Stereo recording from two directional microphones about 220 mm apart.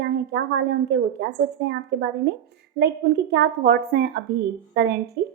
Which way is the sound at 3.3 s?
45° right (ahead or behind).